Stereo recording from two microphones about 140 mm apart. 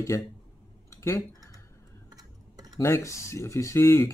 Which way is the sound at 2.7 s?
20° left (ahead or behind).